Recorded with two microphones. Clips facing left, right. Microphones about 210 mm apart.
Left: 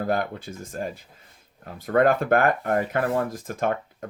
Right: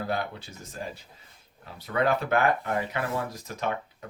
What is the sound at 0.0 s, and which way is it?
Speech, 50° left (ahead or behind).